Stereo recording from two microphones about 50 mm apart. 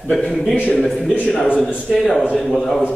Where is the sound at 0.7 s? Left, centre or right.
Centre.